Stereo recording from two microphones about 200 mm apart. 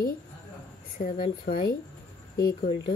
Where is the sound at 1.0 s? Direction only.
45° left (ahead or behind).